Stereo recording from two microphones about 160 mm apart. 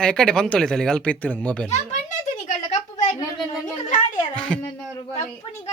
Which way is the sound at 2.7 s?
50° left (ahead or behind).